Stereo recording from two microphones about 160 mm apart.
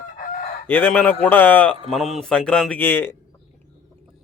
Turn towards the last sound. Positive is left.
turn(degrees=10)  # may be behind; listen again after turning